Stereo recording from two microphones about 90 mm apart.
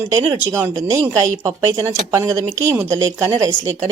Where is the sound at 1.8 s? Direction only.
30° right (ahead or behind).